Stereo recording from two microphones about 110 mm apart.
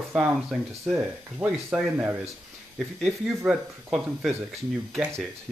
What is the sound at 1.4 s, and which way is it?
Speech, 15° right (ahead or behind).